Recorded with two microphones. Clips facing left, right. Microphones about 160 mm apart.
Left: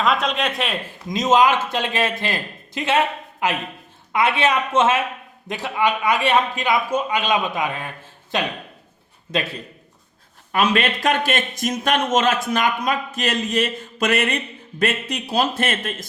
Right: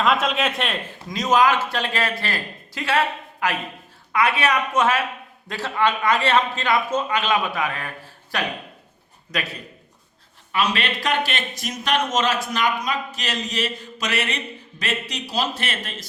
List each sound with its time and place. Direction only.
0.0 s speech: centre (ahead or behind)
1.1 s a man's voice: 20° left (ahead or behind)
10.5 s speech: 50° left (ahead or behind)